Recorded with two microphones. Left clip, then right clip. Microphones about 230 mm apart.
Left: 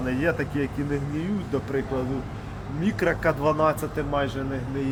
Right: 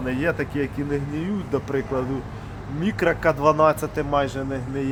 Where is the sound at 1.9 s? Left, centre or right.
Right.